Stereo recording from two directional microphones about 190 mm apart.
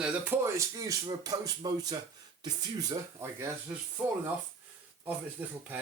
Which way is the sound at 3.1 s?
15° right (ahead or behind).